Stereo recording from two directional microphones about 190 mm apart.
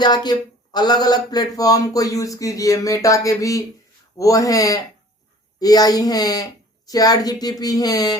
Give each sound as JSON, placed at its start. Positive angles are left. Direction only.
{"t": 0.0, "sound": "speech", "side_deg": 20}